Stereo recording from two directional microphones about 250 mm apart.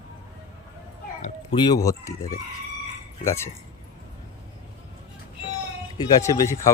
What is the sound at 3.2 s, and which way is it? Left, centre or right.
Speech, centre.